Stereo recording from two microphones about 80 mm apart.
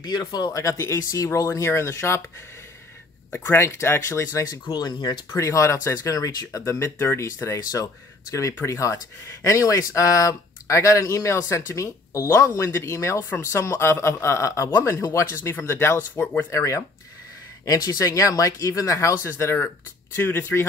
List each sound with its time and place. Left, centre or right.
0.0 s speech: left
0.5 s speech: left
3.5 s speech: left
4.6 s speech: left
5.3 s speech: left
7.0 s speech: left
7.2 s speech: left